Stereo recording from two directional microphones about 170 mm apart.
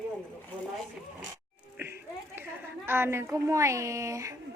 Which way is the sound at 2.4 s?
15° right (ahead or behind).